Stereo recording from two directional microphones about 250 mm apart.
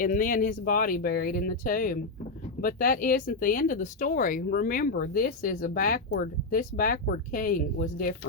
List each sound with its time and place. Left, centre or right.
0.0 s speech: left